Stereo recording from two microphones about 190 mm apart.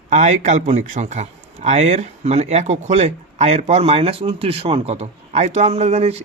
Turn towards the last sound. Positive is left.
turn(degrees=-35)  # may be behind; listen again after turning